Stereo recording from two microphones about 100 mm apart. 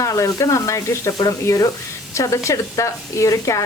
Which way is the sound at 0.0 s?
30° left (ahead or behind).